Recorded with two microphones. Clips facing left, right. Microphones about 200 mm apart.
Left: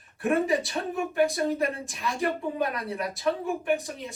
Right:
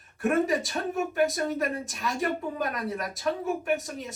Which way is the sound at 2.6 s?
45° right (ahead or behind).